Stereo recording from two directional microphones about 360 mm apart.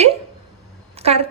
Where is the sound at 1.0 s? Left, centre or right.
Centre.